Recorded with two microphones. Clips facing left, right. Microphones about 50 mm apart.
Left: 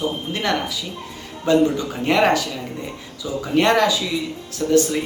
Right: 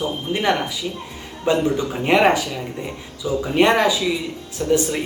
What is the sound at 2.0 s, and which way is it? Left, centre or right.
Speech, centre.